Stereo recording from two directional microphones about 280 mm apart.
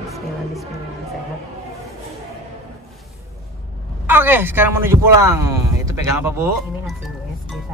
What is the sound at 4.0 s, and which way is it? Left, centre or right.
Speech, centre.